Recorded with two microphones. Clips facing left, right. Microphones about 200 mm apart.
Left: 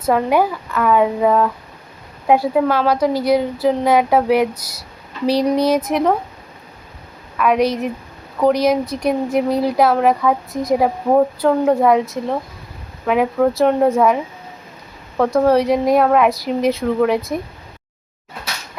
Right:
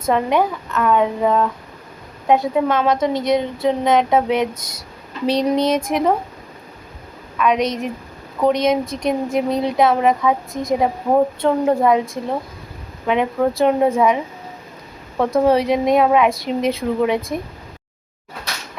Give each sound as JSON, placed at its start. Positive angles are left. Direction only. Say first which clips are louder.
{"t": 0.0, "sound": "speech", "louder": "left 2 dB", "side_deg": 5}
{"t": 7.3, "sound": "speech", "louder": "left 2 dB", "side_deg": 0}
{"t": 8.8, "sound": "speech", "louder": "left 2 dB", "side_deg": -25}
{"t": 9.0, "sound": "speech", "louder": "left 2 dB", "side_deg": 5}
{"t": 11.3, "sound": "speech", "louder": "left 2 dB", "side_deg": 0}
{"t": 15.2, "sound": "speech", "louder": "left 1 dB", "side_deg": 0}